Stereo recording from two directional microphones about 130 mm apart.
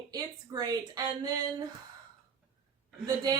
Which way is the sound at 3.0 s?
30° right (ahead or behind).